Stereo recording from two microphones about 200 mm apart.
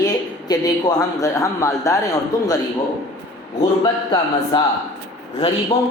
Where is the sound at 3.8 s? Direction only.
20° left (ahead or behind).